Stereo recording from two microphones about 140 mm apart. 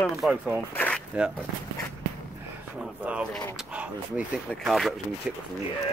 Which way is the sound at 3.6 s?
10° right (ahead or behind).